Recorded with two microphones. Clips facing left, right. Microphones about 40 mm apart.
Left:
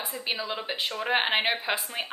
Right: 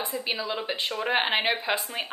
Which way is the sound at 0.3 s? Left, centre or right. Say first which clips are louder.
Left 1 dB; centre.